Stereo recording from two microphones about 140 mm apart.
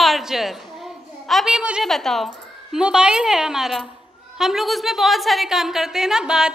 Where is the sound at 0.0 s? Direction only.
Centre (ahead or behind).